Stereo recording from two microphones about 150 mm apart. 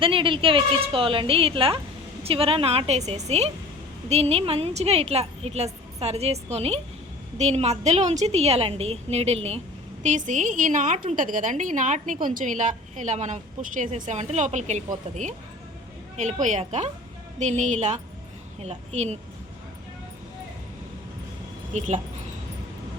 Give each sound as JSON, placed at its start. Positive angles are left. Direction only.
{"t": 0.0, "sound": "a woman's voice", "side_deg": -35}
{"t": 10.0, "sound": "a woman's voice", "side_deg": -55}
{"t": 21.7, "sound": "a woman's voice", "side_deg": -50}